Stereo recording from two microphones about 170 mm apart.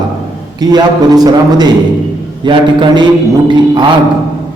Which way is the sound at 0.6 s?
25° right (ahead or behind).